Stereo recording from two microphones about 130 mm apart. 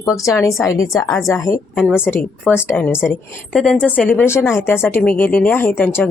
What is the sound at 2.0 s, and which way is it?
Speech, 15° left (ahead or behind).